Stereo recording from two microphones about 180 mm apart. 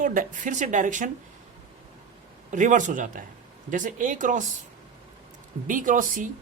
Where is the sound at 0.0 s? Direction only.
45° right (ahead or behind).